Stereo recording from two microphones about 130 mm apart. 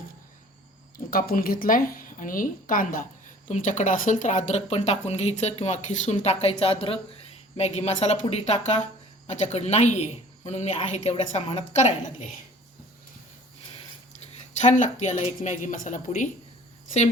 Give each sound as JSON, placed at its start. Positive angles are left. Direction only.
{"t": 0.9, "sound": "a woman's voice", "side_deg": 90}
{"t": 3.5, "sound": "speech", "side_deg": 75}
{"t": 14.6, "sound": "a woman's voice", "side_deg": 65}